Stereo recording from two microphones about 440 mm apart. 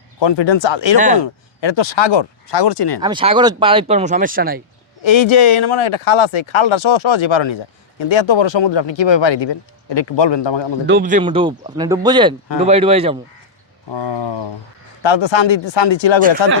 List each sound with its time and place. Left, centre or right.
0.2 s speech: left
0.9 s speech: centre
1.2 s speech: left
3.0 s speech: centre
5.0 s speech: left
10.8 s speech: centre
13.9 s speech: left
16.4 s speech: left